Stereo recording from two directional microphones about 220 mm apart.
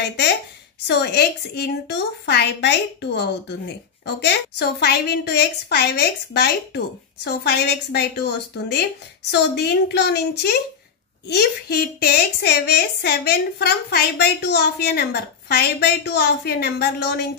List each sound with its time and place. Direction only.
0.8 s a woman's voice: 45° left (ahead or behind)